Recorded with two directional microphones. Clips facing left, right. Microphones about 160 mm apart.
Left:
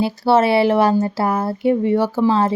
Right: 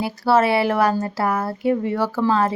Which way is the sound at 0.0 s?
25° left (ahead or behind).